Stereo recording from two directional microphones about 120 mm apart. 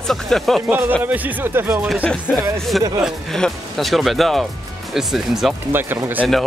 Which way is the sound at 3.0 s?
5° left (ahead or behind).